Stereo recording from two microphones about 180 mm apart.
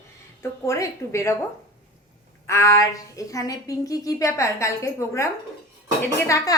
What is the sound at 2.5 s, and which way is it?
A woman's voice, 15° left (ahead or behind).